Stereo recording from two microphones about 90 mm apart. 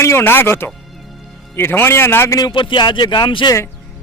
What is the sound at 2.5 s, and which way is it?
Speech, 65° left (ahead or behind).